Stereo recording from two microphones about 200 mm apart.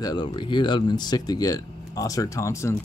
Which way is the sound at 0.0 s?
20° left (ahead or behind).